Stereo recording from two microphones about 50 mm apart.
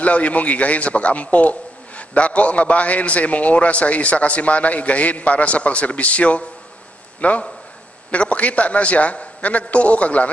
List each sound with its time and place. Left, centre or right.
0.0 s a man's voice: left